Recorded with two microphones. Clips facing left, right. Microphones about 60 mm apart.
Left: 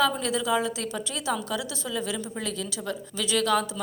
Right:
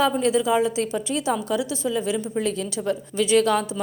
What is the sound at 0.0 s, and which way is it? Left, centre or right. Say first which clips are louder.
A woman's voice: right 5 dB; right.